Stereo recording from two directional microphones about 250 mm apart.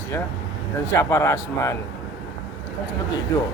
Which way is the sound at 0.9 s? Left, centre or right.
Centre.